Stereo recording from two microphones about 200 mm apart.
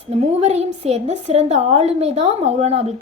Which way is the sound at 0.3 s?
30° right (ahead or behind).